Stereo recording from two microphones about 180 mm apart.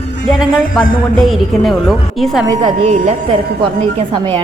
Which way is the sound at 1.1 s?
Centre (ahead or behind).